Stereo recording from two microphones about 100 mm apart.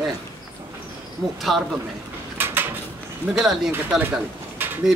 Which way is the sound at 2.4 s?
20° right (ahead or behind).